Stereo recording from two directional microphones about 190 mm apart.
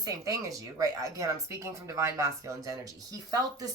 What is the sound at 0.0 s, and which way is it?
Speech, 15° right (ahead or behind).